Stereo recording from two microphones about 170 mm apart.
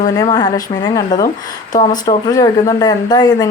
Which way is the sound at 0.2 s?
25° left (ahead or behind).